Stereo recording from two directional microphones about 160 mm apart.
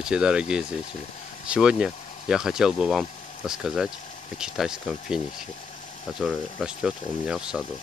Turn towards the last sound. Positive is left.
turn(degrees=-5)  # may be behind; listen again after turning